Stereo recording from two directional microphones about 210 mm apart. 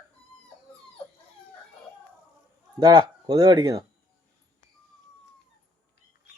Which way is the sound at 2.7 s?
20° right (ahead or behind).